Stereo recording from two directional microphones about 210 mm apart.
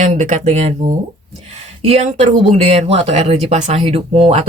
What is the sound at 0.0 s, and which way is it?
Speech, 35° right (ahead or behind).